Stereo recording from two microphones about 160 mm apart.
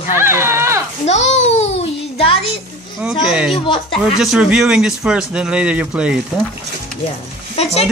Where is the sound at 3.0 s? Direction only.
5° right (ahead or behind).